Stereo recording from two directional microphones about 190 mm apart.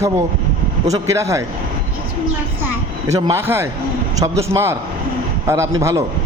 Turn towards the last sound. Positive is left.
turn(degrees=-15)  # may be behind; listen again after turning